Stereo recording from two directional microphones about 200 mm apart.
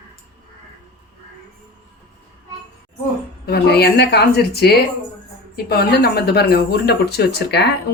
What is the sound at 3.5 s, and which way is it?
Speech, 55° left (ahead or behind).